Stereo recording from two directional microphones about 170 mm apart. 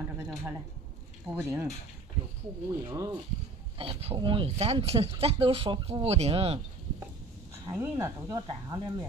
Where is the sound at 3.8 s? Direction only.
35° right (ahead or behind).